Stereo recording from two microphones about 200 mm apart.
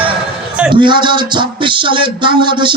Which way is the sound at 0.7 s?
25° right (ahead or behind).